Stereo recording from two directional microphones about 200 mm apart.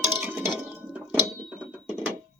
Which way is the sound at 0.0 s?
10° right (ahead or behind).